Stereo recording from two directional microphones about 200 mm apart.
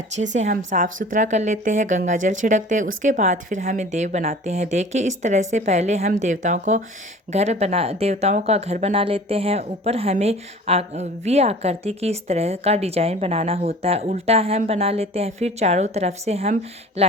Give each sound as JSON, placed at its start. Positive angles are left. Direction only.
{"t": 0.2, "sound": "speech", "side_deg": -35}